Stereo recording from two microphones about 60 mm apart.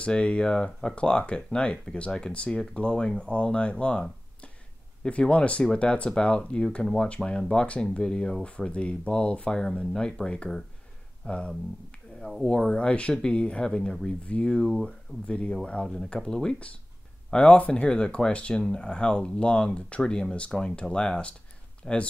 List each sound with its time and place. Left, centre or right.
0.0 s speech: centre
12.2 s speech: centre
12.4 s speech: centre
14.6 s speech: centre
14.9 s speech: centre